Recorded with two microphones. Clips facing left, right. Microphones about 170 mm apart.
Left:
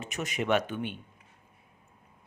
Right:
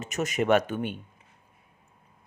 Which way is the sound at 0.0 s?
45° right (ahead or behind).